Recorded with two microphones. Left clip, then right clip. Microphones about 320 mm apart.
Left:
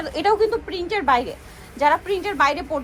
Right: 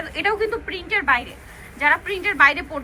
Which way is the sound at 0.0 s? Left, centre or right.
Centre.